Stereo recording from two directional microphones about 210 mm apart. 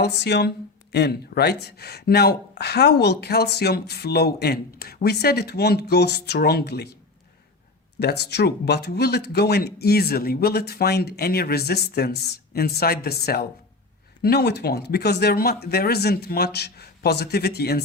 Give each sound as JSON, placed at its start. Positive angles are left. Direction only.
{"t": 0.0, "sound": "speech", "side_deg": 50}
{"t": 7.9, "sound": "speech", "side_deg": 50}